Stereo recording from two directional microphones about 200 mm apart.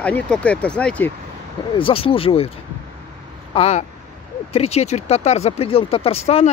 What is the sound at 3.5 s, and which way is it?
Speech, 30° left (ahead or behind).